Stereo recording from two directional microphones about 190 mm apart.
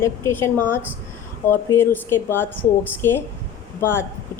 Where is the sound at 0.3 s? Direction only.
10° left (ahead or behind).